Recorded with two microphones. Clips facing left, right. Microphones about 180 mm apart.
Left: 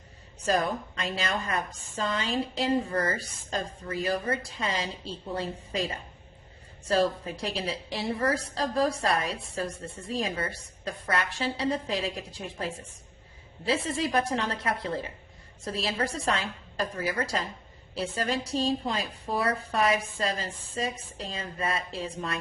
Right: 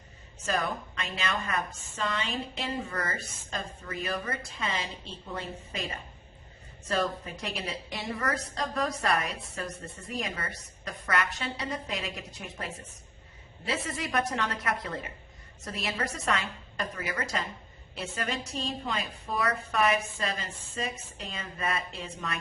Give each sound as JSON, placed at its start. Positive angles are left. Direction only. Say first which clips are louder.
{"t": 0.4, "sound": "a woman's voice", "louder": "left 4 dB", "side_deg": 35}